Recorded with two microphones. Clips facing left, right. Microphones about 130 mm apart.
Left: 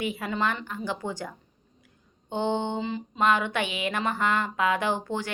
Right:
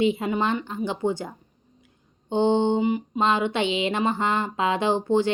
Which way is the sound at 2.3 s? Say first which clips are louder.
Right 7 dB; 20° right (ahead or behind).